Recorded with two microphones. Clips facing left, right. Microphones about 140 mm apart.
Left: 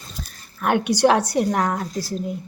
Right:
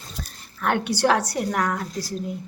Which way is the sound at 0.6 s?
15° left (ahead or behind).